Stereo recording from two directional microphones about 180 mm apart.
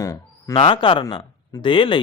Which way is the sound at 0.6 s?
30° left (ahead or behind).